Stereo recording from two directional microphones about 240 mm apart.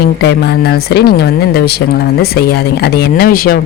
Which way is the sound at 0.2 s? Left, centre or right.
Left.